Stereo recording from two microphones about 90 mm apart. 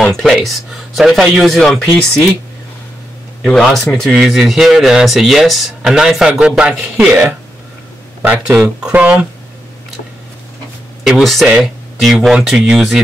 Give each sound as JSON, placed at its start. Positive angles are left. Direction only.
{"t": 0.0, "sound": "speech", "side_deg": 5}
{"t": 3.4, "sound": "speech", "side_deg": 5}
{"t": 8.5, "sound": "speech", "side_deg": -10}
{"t": 11.1, "sound": "speech", "side_deg": 0}